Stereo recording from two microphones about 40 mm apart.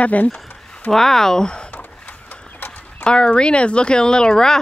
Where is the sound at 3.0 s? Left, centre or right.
Left.